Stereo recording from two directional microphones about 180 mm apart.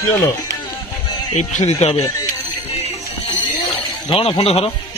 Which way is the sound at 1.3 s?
40° left (ahead or behind).